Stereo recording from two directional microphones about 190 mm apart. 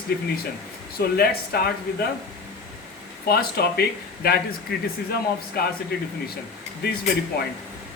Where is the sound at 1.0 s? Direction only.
55° left (ahead or behind).